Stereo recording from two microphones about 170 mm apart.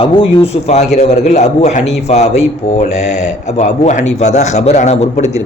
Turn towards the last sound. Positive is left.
turn(degrees=40)  # may be behind; listen again after turning